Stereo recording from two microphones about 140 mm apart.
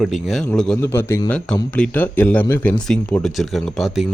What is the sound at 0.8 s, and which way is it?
Speech, 15° left (ahead or behind).